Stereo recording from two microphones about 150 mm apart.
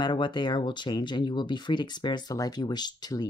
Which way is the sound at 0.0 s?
30° left (ahead or behind).